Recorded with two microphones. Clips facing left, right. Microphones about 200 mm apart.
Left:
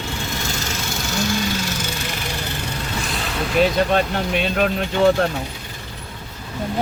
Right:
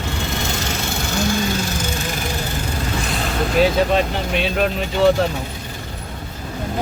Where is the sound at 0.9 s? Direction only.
50° right (ahead or behind).